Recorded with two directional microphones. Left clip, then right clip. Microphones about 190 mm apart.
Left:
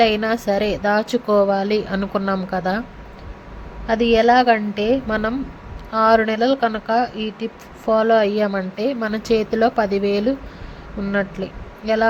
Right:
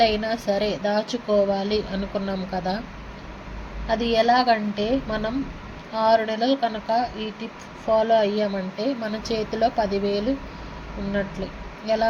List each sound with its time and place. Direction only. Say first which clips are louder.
0.0 s speech: left 4 dB; 30° left (ahead or behind)
3.8 s speech: left 5 dB; 35° left (ahead or behind)